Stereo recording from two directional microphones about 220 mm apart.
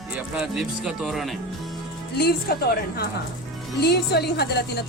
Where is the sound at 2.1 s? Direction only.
45° left (ahead or behind).